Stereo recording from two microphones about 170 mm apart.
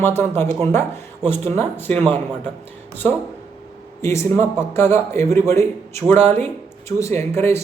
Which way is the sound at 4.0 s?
15° left (ahead or behind).